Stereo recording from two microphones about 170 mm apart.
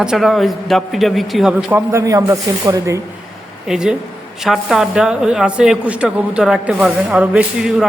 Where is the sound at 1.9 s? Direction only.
20° right (ahead or behind).